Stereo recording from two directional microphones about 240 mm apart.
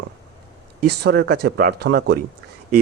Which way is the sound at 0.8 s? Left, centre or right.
Right.